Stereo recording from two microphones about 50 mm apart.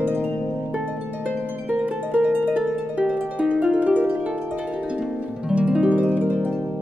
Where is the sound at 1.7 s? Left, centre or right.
Right.